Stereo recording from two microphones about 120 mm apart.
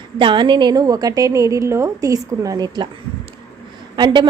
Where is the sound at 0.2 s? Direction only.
45° right (ahead or behind).